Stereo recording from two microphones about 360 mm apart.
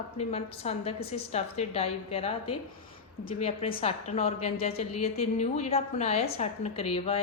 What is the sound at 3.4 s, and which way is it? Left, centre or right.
A woman's voice, centre.